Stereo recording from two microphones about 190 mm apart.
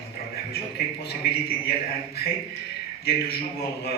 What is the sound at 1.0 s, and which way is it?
Speech, 55° left (ahead or behind).